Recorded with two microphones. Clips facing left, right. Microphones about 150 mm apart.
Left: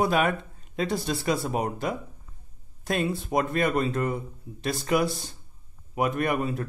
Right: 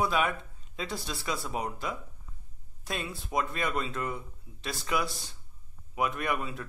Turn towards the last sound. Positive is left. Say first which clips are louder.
# left 6 dB
turn(degrees=45)  # may be behind; listen again after turning